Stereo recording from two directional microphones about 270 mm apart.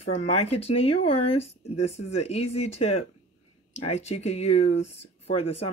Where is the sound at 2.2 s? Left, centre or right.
Left.